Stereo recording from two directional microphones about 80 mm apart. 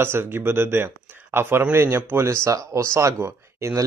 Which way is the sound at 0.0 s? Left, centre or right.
Right.